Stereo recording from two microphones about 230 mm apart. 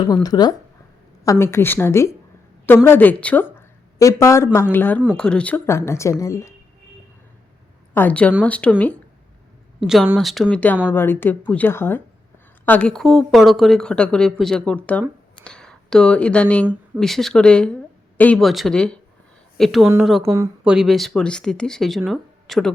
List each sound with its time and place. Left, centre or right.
0.0 s a woman's voice: centre
7.9 s speech: centre
9.8 s speech: centre
20.3 s speech: centre
20.7 s speech: centre